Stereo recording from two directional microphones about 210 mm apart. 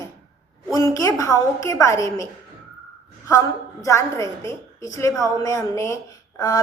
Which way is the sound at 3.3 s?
15° left (ahead or behind).